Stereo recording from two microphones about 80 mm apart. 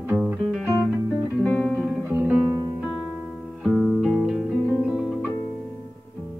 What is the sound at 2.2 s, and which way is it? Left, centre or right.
Music, centre.